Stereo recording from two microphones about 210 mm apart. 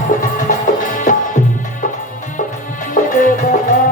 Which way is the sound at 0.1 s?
40° left (ahead or behind).